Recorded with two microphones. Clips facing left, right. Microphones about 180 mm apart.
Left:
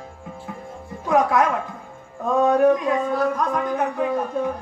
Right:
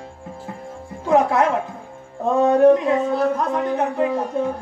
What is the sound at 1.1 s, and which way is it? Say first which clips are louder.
Speech: right 2 dB; 25° right (ahead or behind).